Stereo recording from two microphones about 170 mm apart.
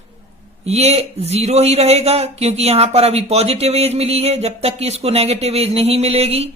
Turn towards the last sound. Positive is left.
turn(degrees=-35)  # may be behind; listen again after turning